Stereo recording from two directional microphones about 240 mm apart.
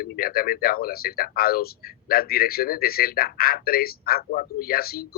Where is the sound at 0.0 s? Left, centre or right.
Left.